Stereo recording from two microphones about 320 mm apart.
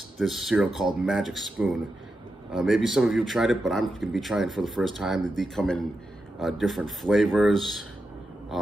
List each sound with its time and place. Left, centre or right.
0.2 s a man's voice: centre